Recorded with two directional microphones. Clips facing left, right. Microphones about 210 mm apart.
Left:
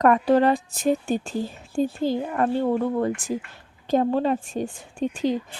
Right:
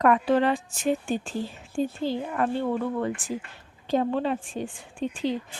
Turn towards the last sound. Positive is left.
turn(degrees=45)  # may be behind; listen again after turning